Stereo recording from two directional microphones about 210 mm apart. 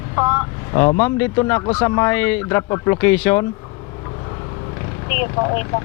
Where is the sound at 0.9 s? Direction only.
10° left (ahead or behind).